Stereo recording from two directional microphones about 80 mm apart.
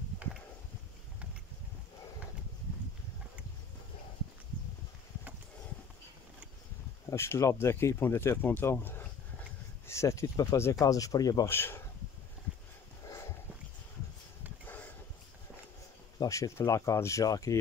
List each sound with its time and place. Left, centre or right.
7.1 s speech: left
9.8 s speech: left
11.4 s speech: left
13.0 s dog: left
14.7 s a sound: left
16.2 s speech: left